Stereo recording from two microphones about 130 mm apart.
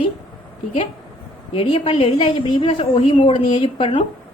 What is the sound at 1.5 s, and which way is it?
A woman's voice, 50° left (ahead or behind).